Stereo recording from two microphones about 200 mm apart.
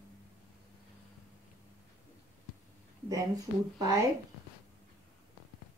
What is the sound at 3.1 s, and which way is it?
Speech, 15° right (ahead or behind).